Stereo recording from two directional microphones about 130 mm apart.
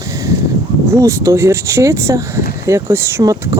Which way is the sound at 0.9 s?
25° right (ahead or behind).